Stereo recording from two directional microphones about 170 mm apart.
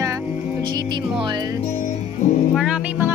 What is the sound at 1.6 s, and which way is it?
Music, 40° left (ahead or behind).